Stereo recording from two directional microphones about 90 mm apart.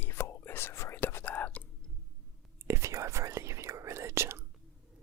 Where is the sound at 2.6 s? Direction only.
30° right (ahead or behind).